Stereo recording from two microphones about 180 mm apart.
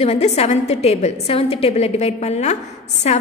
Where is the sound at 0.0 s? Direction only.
35° left (ahead or behind).